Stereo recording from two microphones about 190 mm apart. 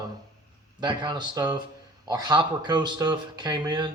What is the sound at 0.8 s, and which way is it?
Speech, 25° right (ahead or behind).